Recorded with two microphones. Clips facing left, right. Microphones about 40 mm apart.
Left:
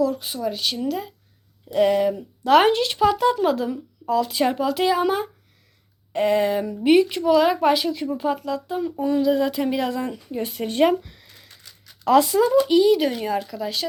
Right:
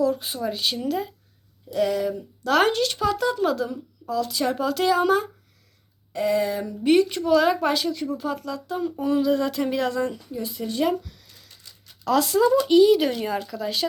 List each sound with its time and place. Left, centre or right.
0.0 s speech: centre
1.7 s speech: left
4.5 s speech: centre
6.1 s speech: left
6.8 s speech: centre
8.1 s speech: left
8.7 s speech: centre
9.0 s speech: centre
9.3 s speech: centre
10.3 s speech: left
11.0 s a sound: left
12.3 s speech: centre
12.6 s speech: centre